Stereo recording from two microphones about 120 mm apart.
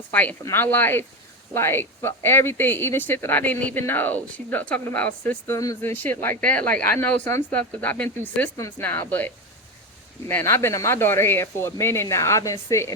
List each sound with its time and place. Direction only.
0.1 s speech: 15° left (ahead or behind)